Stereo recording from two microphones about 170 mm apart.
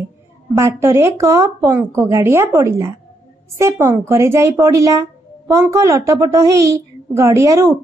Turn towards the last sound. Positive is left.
turn(degrees=-20)  # may be behind; listen again after turning